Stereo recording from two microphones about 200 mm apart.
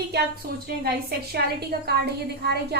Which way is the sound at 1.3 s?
55° right (ahead or behind).